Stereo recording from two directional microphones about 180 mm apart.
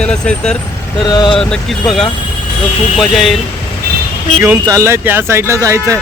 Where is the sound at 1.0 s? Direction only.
25° left (ahead or behind).